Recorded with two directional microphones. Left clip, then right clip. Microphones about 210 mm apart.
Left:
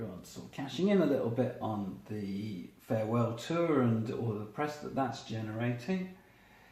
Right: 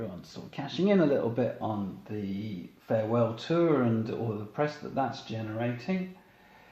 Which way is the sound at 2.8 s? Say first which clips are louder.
Right 5 dB; 35° right (ahead or behind).